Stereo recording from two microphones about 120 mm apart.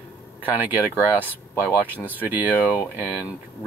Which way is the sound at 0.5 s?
15° right (ahead or behind).